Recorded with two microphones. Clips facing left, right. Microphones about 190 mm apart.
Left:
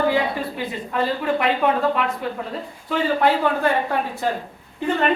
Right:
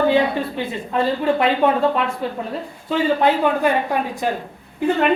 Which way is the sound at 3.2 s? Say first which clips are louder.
Right 2 dB; 20° right (ahead or behind).